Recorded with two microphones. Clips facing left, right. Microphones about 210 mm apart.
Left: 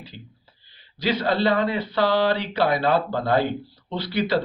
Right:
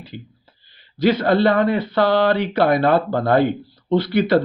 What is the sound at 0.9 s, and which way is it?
Speech, 50° right (ahead or behind).